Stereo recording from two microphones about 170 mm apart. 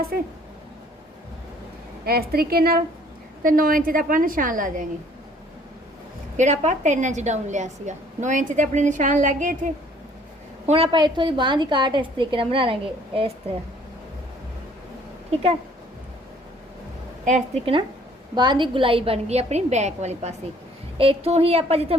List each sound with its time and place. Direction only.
2.0 s a woman's voice: 65° right (ahead or behind)
6.3 s a woman's voice: 45° right (ahead or behind)
10.7 s a woman's voice: 30° right (ahead or behind)
17.2 s a woman's voice: 40° right (ahead or behind)